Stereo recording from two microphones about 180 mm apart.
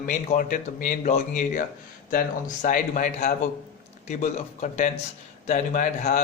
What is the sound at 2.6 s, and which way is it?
A man's voice, 45° left (ahead or behind).